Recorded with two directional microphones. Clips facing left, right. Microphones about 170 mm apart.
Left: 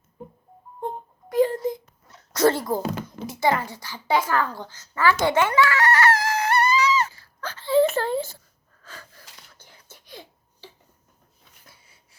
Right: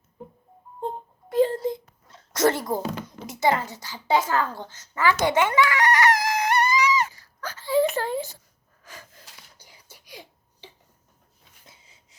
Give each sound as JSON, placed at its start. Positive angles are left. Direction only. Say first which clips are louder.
{"t": 1.3, "sound": "wail", "louder": "even", "side_deg": -25}
{"t": 3.2, "sound": "a child's voice", "louder": "even", "side_deg": -20}
{"t": 4.3, "sound": "a sound", "louder": "left 1 dB", "side_deg": -20}
{"t": 8.8, "sound": "gasp", "louder": "left 1 dB", "side_deg": -15}
{"t": 11.6, "sound": "sniff", "louder": "right 1 dB", "side_deg": -20}